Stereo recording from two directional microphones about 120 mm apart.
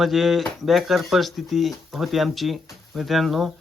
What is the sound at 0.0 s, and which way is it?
Speech, centre (ahead or behind).